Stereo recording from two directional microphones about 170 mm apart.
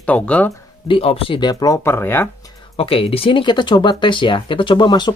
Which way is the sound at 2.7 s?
35° left (ahead or behind).